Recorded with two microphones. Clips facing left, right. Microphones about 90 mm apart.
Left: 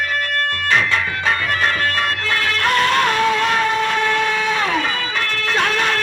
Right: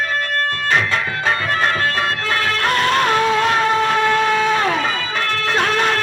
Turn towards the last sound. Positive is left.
turn(degrees=-35)  # may be behind; listen again after turning